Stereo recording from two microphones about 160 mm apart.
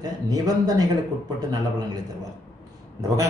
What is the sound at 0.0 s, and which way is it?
Speech, 25° right (ahead or behind).